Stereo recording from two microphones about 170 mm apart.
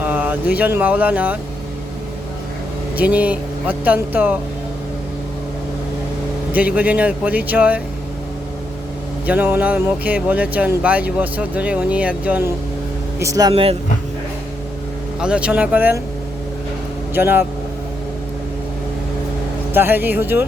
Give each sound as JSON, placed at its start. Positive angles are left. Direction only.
{"t": 0.0, "sound": "speech", "side_deg": -10}
{"t": 3.0, "sound": "speech", "side_deg": -10}
{"t": 6.5, "sound": "speech", "side_deg": -10}
{"t": 9.2, "sound": "speech", "side_deg": -10}
{"t": 13.1, "sound": "speech", "side_deg": -20}
{"t": 13.5, "sound": "speech", "side_deg": -35}
{"t": 15.2, "sound": "speech", "side_deg": -5}
{"t": 17.2, "sound": "speech", "side_deg": -10}
{"t": 19.7, "sound": "speech", "side_deg": -10}